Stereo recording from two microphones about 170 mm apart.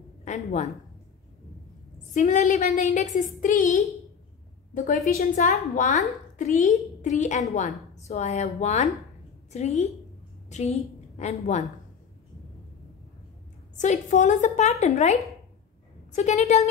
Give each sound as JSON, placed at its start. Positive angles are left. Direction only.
{"t": 0.2, "sound": "speech", "side_deg": 40}
{"t": 2.1, "sound": "a woman's voice", "side_deg": 50}
{"t": 13.7, "sound": "a woman's voice", "side_deg": 45}